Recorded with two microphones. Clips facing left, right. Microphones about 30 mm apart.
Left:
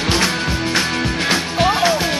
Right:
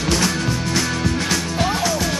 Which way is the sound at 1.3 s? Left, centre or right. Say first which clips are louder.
Left 4 dB; left.